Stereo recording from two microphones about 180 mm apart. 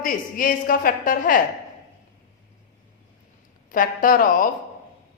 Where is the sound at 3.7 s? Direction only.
50° left (ahead or behind).